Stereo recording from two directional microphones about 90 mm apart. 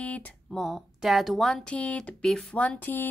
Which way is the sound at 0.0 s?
15° left (ahead or behind).